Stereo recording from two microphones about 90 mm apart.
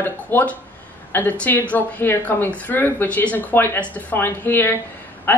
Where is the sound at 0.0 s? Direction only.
25° left (ahead or behind).